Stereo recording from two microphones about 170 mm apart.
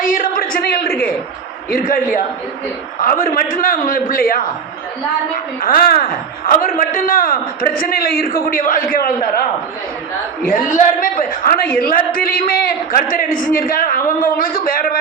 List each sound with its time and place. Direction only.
0.0 s a sound: 55° left (ahead or behind)
1.7 s a man's voice: 55° left (ahead or behind)
5.6 s a man's voice: 55° left (ahead or behind)
10.4 s a woman's voice: 50° left (ahead or behind)